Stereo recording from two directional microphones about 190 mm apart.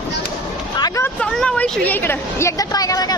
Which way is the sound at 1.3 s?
5° left (ahead or behind).